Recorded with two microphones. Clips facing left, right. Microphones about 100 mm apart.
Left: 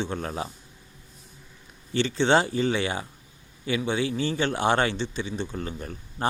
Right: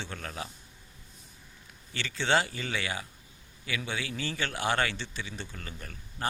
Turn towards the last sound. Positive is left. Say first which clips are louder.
# left 7 dB
turn(degrees=30)  # may be behind; listen again after turning